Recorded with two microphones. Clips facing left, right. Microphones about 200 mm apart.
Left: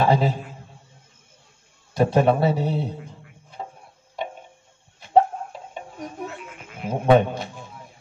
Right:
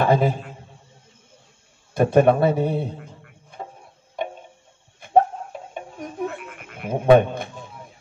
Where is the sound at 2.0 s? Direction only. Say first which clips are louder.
Right 3 dB; 55° right (ahead or behind).